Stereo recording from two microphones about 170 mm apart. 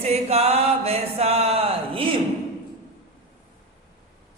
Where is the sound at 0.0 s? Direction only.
40° right (ahead or behind).